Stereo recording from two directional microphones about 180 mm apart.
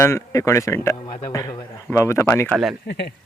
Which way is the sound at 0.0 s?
15° left (ahead or behind).